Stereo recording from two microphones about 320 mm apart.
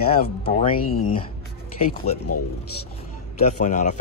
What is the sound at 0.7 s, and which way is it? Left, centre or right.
Speech, left.